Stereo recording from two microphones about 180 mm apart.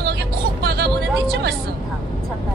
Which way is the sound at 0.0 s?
65° right (ahead or behind).